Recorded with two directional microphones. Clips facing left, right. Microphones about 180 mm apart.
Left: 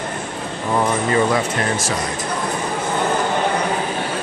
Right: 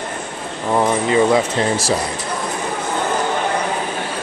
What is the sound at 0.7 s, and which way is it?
Speech, 20° right (ahead or behind).